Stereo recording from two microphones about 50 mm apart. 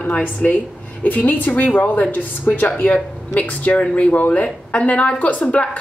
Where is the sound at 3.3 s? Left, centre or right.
Left.